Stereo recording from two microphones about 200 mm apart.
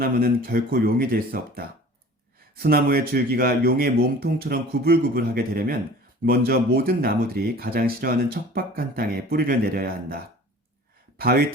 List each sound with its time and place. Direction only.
0.0 s speech: 45° right (ahead or behind)
11.2 s speech: 50° right (ahead or behind)